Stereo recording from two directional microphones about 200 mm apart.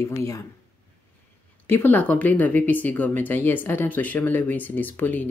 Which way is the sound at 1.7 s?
10° left (ahead or behind).